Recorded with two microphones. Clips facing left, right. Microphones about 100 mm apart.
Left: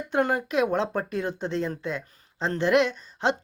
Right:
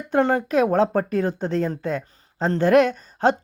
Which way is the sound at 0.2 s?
30° right (ahead or behind).